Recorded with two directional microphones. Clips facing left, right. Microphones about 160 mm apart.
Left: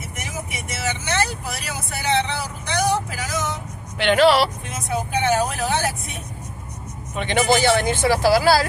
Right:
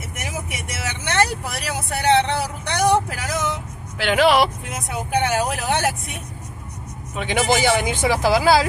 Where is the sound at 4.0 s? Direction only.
5° right (ahead or behind).